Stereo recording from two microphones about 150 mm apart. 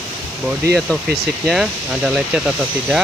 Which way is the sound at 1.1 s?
Centre (ahead or behind).